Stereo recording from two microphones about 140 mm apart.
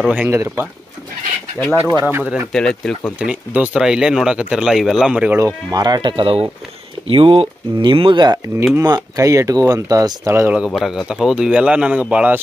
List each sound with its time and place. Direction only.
0.1 s speech: 15° right (ahead or behind)
2.0 s speech: 10° right (ahead or behind)
2.5 s speech: 5° left (ahead or behind)
3.2 s speech: 10° right (ahead or behind)
5.4 s speech: 30° right (ahead or behind)
10.5 s speech: 5° right (ahead or behind)